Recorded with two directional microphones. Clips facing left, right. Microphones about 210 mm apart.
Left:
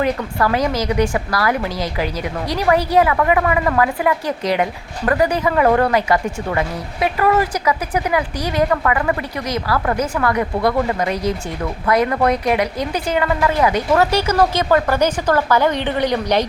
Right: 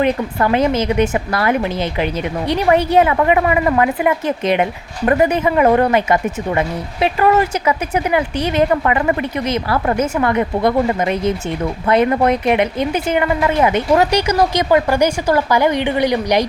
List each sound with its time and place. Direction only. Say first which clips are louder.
0.0 s a woman's voice: right 2 dB; 25° right (ahead or behind)